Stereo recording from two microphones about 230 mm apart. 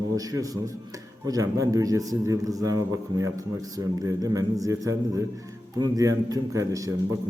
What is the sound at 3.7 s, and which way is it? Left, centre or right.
A man's voice, centre.